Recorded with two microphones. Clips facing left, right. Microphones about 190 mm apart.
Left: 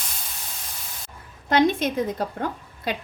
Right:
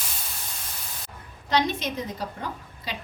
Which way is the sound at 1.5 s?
55° left (ahead or behind).